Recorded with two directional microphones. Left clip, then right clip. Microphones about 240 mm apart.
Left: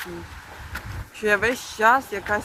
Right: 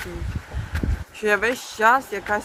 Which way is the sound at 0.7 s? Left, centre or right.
Centre.